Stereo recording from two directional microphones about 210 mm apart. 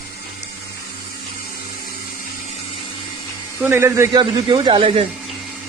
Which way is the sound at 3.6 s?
10° right (ahead or behind).